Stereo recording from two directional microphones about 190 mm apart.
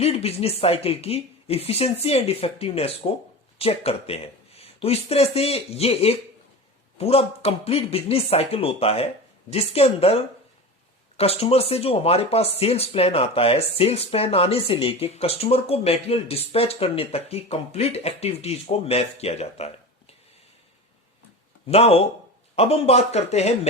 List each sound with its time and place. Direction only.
0.0 s speech: 30° left (ahead or behind)
11.2 s speech: 30° left (ahead or behind)
21.7 s speech: 30° left (ahead or behind)